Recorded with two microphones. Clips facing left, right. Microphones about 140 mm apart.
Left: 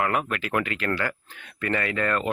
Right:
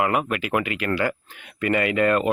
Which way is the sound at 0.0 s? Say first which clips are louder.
Right 3 dB; 5° right (ahead or behind).